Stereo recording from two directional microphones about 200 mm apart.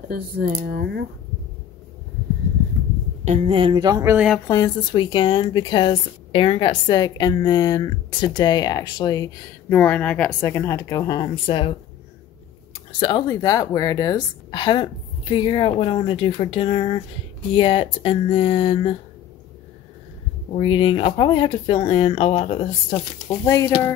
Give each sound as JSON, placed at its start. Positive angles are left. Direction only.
{"t": 0.1, "sound": "speech", "side_deg": -50}
{"t": 3.3, "sound": "speech", "side_deg": -30}
{"t": 4.5, "sound": "speech", "side_deg": 20}
{"t": 13.0, "sound": "speech", "side_deg": 20}
{"t": 20.5, "sound": "speech", "side_deg": 25}